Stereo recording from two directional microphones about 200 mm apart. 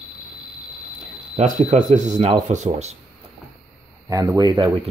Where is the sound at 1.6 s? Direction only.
40° right (ahead or behind).